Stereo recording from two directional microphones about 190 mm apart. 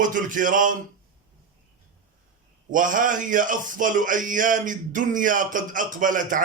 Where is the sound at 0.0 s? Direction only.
45° right (ahead or behind).